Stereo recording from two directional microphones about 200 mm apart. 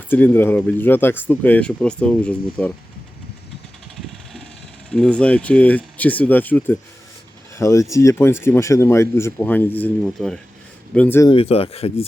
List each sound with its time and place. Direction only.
0.1 s speech: 10° left (ahead or behind)
4.9 s speech: 5° left (ahead or behind)
11.3 s speech: 30° left (ahead or behind)